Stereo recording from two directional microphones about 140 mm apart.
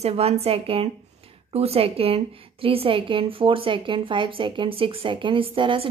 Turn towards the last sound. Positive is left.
turn(degrees=-40)  # may be behind; listen again after turning